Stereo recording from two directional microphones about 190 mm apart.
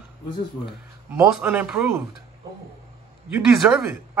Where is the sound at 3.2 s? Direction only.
5° right (ahead or behind).